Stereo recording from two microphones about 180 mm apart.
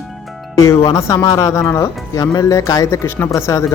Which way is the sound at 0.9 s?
20° left (ahead or behind).